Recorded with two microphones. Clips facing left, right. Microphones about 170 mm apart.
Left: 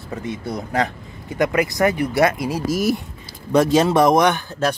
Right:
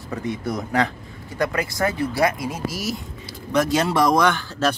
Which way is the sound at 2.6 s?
50° left (ahead or behind).